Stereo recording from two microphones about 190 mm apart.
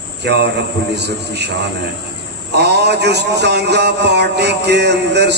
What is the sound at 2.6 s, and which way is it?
Mantra, 60° right (ahead or behind).